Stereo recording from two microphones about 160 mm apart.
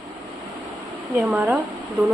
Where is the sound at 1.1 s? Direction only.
10° right (ahead or behind).